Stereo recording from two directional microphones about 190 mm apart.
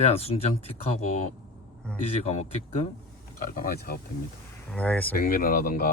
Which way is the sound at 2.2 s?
35° left (ahead or behind).